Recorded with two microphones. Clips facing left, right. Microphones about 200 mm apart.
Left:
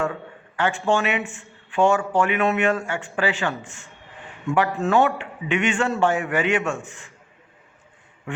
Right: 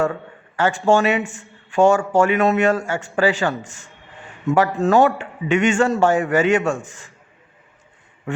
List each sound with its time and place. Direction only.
0.5 s a man's voice: 40° right (ahead or behind)
1.2 s speech: centre (ahead or behind)
1.7 s a man's voice: 45° right (ahead or behind)
3.7 s speech: centre (ahead or behind)
4.4 s a man's voice: 40° right (ahead or behind)